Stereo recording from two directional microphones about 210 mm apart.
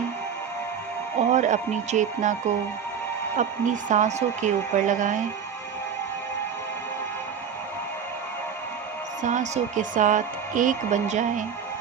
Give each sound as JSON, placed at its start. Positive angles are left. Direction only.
{"t": 1.2, "sound": "a woman's voice", "side_deg": -35}
{"t": 9.2, "sound": "a woman's voice", "side_deg": -35}